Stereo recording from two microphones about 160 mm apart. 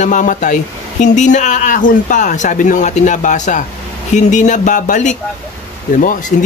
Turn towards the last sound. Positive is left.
turn(degrees=60)  # may be behind; listen again after turning